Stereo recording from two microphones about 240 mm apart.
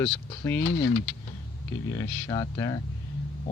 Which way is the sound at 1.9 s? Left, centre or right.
Centre.